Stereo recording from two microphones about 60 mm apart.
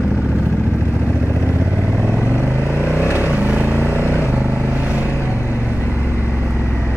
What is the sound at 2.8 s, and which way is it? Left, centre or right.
Vehicle, right.